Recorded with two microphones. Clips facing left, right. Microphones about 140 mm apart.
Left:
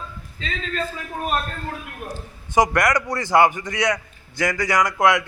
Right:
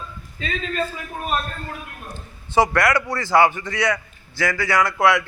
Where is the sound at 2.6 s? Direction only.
20° left (ahead or behind).